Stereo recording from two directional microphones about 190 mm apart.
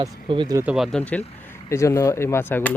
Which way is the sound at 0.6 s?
5° right (ahead or behind).